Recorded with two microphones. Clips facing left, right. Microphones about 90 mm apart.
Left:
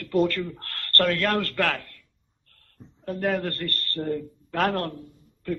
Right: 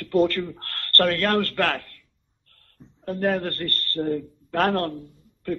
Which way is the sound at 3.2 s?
35° right (ahead or behind).